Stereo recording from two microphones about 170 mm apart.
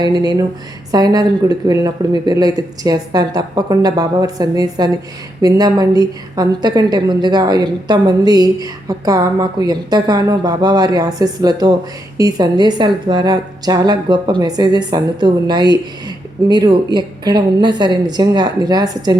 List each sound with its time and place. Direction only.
0.0 s a woman's voice: 25° right (ahead or behind)